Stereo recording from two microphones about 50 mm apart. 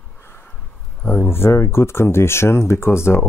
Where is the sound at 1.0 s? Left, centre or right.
Left.